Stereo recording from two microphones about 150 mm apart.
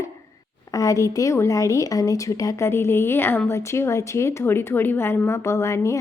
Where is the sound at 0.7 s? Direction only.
20° left (ahead or behind).